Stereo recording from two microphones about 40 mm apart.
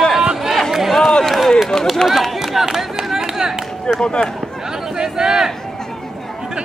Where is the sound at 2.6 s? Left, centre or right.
Centre.